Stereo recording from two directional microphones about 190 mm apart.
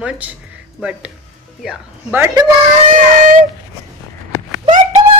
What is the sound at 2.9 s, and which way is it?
Speech, 45° right (ahead or behind).